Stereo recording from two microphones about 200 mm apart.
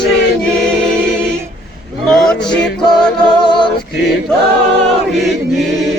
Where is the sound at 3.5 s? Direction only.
25° left (ahead or behind).